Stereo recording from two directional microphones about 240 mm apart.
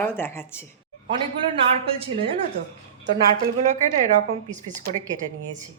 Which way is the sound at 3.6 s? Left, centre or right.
Right.